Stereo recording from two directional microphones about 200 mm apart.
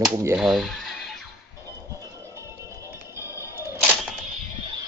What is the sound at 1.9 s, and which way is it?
Music, 15° right (ahead or behind).